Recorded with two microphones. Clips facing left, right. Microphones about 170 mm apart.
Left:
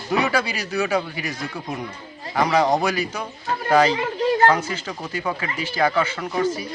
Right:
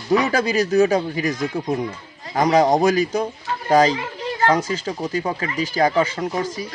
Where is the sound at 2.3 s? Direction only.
45° right (ahead or behind).